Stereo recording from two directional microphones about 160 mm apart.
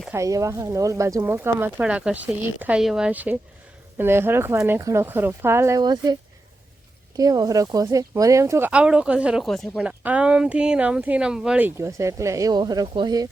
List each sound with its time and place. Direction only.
0.1 s speech: 20° right (ahead or behind)
7.2 s speech: 20° right (ahead or behind); by 11.7 s 5° right (ahead or behind)
11.8 s speech: 20° right (ahead or behind)